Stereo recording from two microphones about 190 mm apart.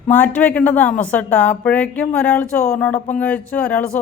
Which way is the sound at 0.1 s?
10° left (ahead or behind).